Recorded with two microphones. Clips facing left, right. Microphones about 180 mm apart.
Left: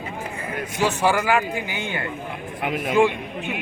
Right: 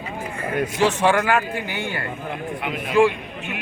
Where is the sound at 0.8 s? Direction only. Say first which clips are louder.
Right 1 dB; 10° left (ahead or behind).